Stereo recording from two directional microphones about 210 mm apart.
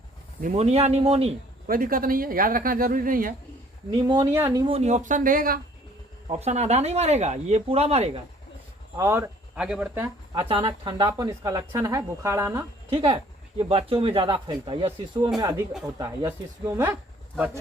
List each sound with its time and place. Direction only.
0.4 s speech: 30° right (ahead or behind)
1.6 s speech: 45° right (ahead or behind)
4.3 s speech: 10° right (ahead or behind)
4.6 s speech: 30° right (ahead or behind)
6.2 s speech: 30° right (ahead or behind)
9.0 s speech: 15° right (ahead or behind)
10.5 s speech: 25° right (ahead or behind)
13.6 s speech: 30° right (ahead or behind); by 17.6 s 10° right (ahead or behind)